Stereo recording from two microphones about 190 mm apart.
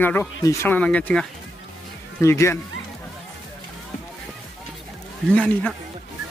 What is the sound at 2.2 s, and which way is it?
Speech, 15° left (ahead or behind).